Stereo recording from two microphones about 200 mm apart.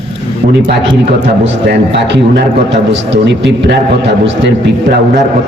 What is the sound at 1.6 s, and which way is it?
A man's voice, 60° right (ahead or behind).